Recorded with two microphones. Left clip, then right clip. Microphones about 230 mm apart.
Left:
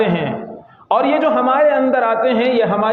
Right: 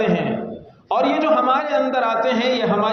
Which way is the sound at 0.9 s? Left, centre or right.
Left.